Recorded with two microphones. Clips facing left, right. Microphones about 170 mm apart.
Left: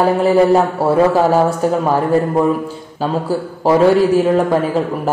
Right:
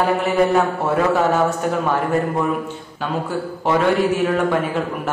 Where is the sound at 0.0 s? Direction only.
35° left (ahead or behind).